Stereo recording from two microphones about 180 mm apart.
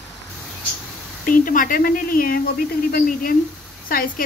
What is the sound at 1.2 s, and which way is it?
Speech, 50° left (ahead or behind).